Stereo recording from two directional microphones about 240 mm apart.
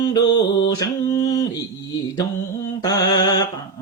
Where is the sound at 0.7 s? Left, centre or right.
Centre.